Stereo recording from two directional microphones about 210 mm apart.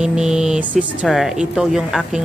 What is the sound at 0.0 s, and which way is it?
A woman's voice, 5° right (ahead or behind).